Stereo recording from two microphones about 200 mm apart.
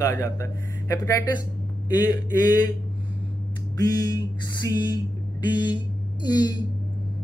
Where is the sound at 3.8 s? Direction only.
20° left (ahead or behind).